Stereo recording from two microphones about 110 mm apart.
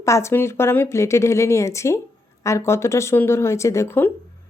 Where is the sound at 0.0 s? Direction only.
25° left (ahead or behind).